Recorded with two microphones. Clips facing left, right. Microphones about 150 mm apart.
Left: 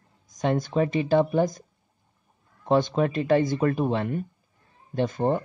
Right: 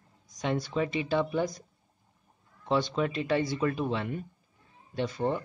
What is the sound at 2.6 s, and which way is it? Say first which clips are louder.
Speech: left 6 dB; 50° left (ahead or behind).